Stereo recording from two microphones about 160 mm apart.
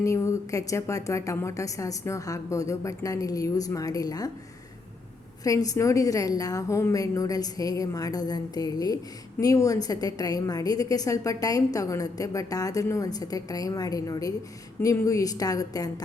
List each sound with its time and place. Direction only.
0.0 s a woman's voice: 20° left (ahead or behind)
5.4 s a woman's voice: 20° left (ahead or behind)